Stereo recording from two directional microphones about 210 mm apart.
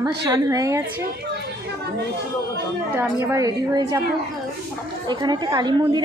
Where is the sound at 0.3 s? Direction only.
15° right (ahead or behind).